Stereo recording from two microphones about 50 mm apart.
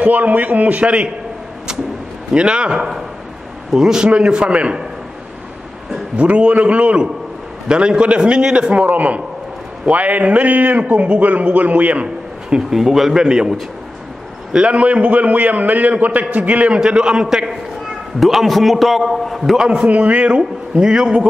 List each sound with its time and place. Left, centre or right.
0.0 s a man's voice: right
2.3 s a man's voice: centre
6.1 s a man's voice: right
8.8 s a man's voice: right; by 17.5 s centre
18.2 s a man's voice: centre
19.7 s a man's voice: right